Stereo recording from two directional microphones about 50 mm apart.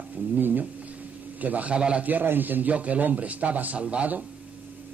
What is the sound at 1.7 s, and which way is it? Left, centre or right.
Speech, centre.